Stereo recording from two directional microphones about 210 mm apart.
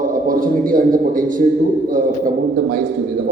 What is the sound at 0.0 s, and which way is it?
A man's voice, 40° right (ahead or behind).